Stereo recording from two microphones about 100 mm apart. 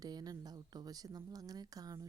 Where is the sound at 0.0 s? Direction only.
40° right (ahead or behind).